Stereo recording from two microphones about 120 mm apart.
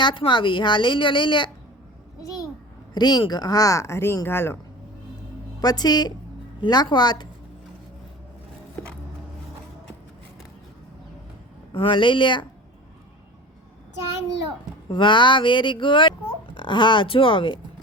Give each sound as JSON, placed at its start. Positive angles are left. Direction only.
{"t": 0.0, "sound": "a woman's voice", "side_deg": 45}
{"t": 2.9, "sound": "speech", "side_deg": 35}
{"t": 5.5, "sound": "speech", "side_deg": 35}
{"t": 11.7, "sound": "a woman's voice", "side_deg": 50}
{"t": 14.8, "sound": "a woman's voice", "side_deg": 45}